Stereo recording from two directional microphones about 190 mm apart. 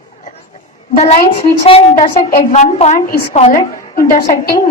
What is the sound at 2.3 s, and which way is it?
A woman's voice, 45° left (ahead or behind).